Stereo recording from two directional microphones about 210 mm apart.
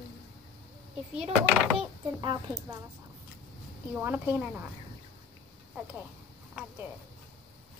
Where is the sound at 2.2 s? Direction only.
20° right (ahead or behind).